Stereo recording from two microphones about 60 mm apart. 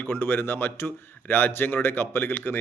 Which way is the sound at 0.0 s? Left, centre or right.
Left.